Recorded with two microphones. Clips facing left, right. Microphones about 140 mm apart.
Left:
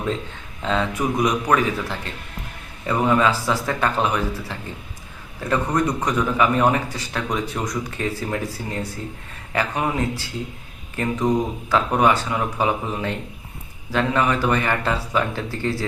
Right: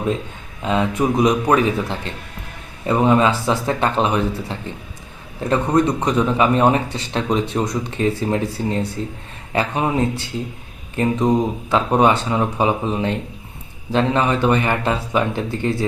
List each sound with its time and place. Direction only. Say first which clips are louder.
0.6 s speech: right 4 dB; 15° right (ahead or behind)